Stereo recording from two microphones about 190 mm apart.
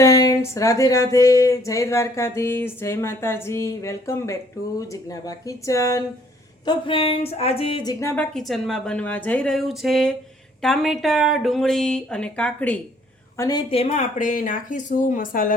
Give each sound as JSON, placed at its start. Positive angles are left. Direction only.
{"t": 0.0, "sound": "speech", "side_deg": 20}
{"t": 6.7, "sound": "speech", "side_deg": 30}